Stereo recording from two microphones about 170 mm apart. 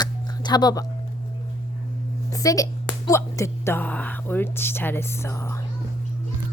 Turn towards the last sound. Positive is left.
turn(degrees=15)  # may be behind; listen again after turning